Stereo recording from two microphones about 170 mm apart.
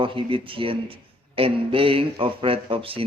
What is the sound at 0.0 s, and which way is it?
A man's voice, 30° right (ahead or behind).